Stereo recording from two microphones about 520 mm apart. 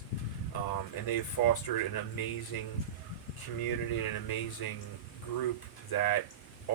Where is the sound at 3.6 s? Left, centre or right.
Left.